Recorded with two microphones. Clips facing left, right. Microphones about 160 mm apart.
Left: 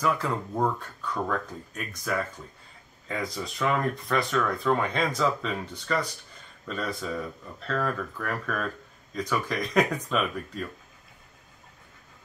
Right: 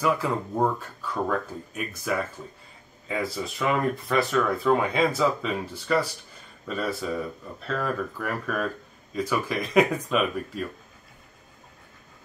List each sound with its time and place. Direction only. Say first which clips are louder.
0.0 s speech: right 2 dB; 5° right (ahead or behind)